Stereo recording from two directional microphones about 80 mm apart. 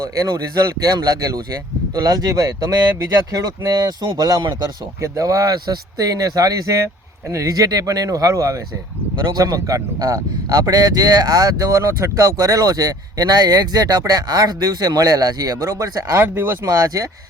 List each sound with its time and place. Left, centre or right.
0.8 s a man's voice: right
16.1 s speech: right
16.6 s a man's voice: right